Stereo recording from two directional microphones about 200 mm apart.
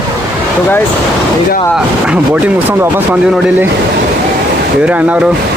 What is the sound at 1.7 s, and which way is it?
Speech, 5° right (ahead or behind).